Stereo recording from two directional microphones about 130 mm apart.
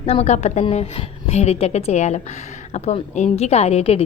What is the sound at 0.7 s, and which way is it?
A woman's voice, 50° left (ahead or behind).